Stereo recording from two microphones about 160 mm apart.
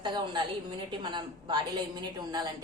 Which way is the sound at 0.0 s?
30° right (ahead or behind).